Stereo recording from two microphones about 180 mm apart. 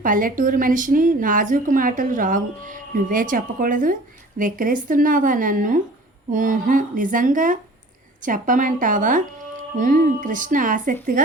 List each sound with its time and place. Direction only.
0.0 s a woman's voice: 50° right (ahead or behind)